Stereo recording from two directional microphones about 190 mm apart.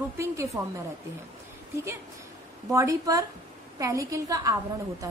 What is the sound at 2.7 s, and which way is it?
A woman's voice, 15° right (ahead or behind).